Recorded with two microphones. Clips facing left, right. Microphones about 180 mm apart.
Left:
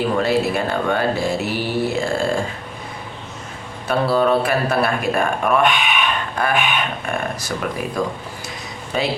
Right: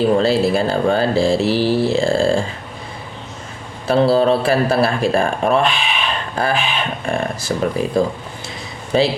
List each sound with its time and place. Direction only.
0.2 s a man's voice: 30° right (ahead or behind)
3.8 s a man's voice: 30° right (ahead or behind)